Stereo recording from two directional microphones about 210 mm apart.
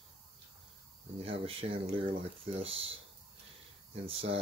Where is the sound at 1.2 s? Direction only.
25° right (ahead or behind).